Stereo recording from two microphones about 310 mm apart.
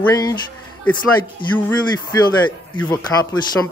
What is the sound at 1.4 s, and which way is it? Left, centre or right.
Speech, centre.